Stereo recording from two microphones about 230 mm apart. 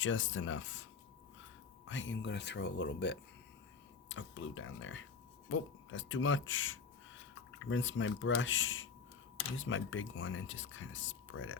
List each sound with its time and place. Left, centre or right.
0.0 s speech: left
1.9 s speech: left